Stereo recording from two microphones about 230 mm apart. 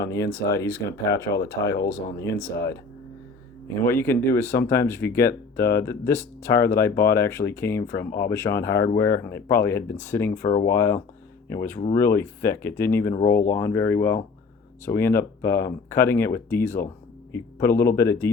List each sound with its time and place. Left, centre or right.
0.0 s speech: centre
3.8 s speech: centre
15.4 s speech: left
15.6 s speech: centre